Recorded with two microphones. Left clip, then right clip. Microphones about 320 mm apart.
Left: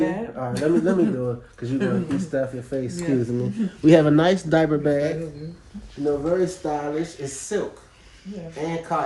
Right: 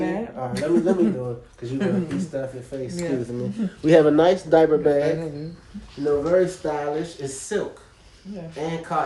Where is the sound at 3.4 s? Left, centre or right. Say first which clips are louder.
Left 4 dB; centre.